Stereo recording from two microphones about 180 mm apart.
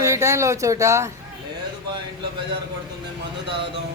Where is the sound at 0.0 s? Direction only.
15° right (ahead or behind).